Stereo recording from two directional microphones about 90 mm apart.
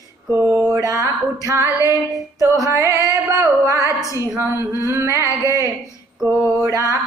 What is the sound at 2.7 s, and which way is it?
Speech, 30° right (ahead or behind).